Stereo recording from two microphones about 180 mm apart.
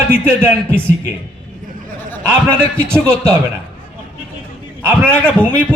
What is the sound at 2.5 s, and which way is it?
Speech, 5° left (ahead or behind).